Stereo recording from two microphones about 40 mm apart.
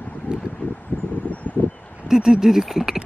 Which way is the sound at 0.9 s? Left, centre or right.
Left.